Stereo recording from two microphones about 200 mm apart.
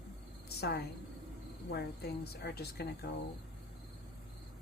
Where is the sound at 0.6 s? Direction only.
55° left (ahead or behind).